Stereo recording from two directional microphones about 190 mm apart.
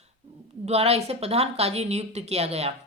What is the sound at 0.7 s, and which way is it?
Speech, 35° right (ahead or behind).